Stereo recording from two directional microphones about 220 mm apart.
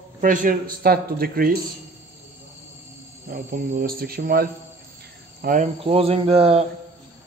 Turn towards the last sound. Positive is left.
turn(degrees=-25)  # may be behind; listen again after turning